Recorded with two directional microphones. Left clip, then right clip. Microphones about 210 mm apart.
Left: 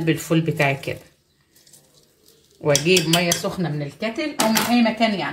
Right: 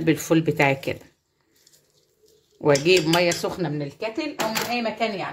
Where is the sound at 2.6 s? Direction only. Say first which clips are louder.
Even; 45° right (ahead or behind).